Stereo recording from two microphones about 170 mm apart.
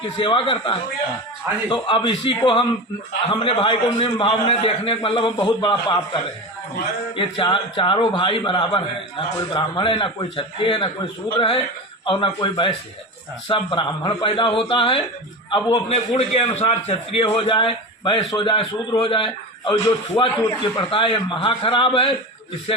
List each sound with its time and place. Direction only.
0.2 s a man's voice: 30° left (ahead or behind)
7.2 s a man's voice: 30° left (ahead or behind)